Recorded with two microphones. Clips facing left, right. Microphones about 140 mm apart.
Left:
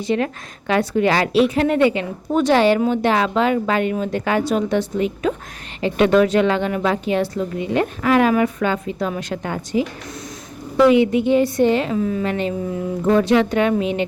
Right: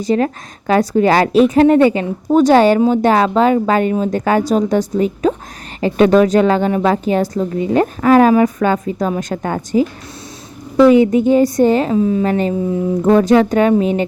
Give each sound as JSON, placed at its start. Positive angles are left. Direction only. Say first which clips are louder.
{"t": 0.0, "sound": "speech", "louder": "right 5 dB", "side_deg": -40}
{"t": 10.8, "sound": "speech", "louder": "right 4 dB", "side_deg": -40}
{"t": 11.9, "sound": "a woman's voice", "louder": "right 6 dB", "side_deg": -25}
{"t": 12.2, "sound": "speech", "louder": "right 6 dB", "side_deg": -40}